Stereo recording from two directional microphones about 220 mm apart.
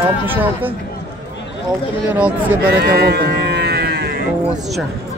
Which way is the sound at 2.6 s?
45° right (ahead or behind).